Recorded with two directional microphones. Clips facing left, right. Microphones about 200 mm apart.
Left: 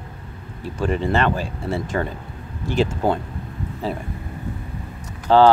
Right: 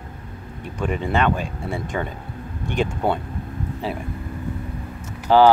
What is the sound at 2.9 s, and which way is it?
Speech, centre (ahead or behind).